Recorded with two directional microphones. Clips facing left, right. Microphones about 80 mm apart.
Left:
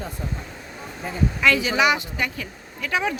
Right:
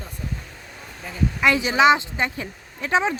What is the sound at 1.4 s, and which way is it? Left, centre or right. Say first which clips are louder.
Speech: right 3 dB; right.